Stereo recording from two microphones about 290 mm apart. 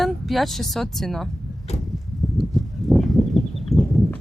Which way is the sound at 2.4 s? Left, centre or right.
Centre.